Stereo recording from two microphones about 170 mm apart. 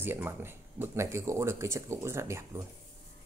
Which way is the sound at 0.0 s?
15° right (ahead or behind).